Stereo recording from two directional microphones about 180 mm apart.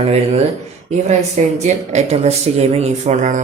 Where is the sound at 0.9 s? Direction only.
40° right (ahead or behind).